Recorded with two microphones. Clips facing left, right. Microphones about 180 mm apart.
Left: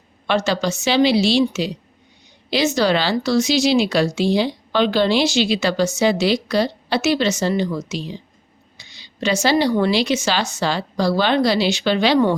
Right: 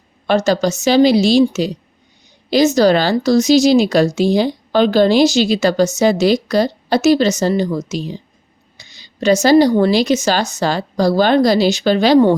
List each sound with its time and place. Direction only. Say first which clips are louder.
0.3 s speech: right 5 dB; 40° right (ahead or behind)